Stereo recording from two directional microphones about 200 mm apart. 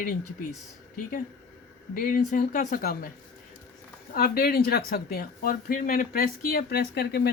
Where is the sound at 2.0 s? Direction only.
45° left (ahead or behind).